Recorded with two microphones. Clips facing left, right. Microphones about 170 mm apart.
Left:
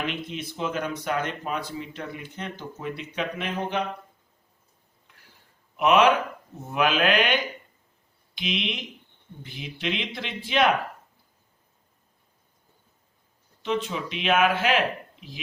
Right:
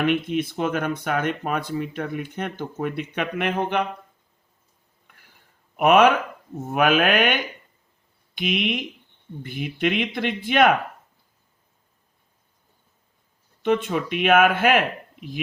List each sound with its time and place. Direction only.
0.0 s speech: 55° right (ahead or behind)
5.7 s speech: 55° right (ahead or behind)
13.6 s speech: 55° right (ahead or behind)